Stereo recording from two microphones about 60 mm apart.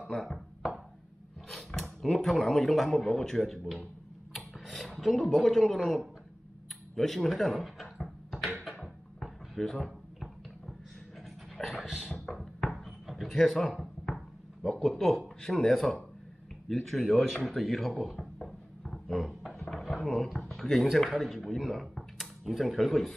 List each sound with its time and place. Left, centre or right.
0.0 s speech: centre
1.5 s speech: centre
7.0 s a sound: centre
11.5 s dog: centre
13.1 s a sound: centre
14.7 s speech: centre
18.4 s a sound: centre
19.7 s drawer open or close: centre
20.3 s speech: centre